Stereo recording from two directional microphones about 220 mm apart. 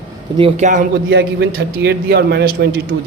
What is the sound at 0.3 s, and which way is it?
Speech, 25° right (ahead or behind).